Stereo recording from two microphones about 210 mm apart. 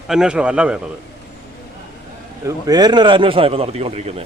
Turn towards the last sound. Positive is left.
turn(degrees=-30)  # may be behind; listen again after turning